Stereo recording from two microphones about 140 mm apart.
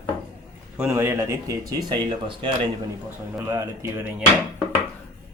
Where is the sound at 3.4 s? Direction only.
25° right (ahead or behind).